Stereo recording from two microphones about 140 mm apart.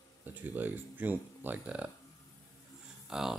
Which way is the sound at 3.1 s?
5° right (ahead or behind).